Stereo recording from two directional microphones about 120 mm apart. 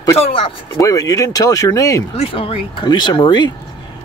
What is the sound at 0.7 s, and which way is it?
Speech, 30° left (ahead or behind).